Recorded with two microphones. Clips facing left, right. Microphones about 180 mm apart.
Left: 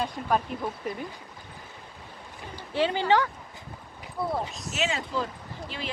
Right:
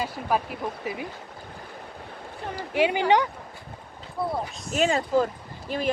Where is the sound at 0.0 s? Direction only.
5° right (ahead or behind).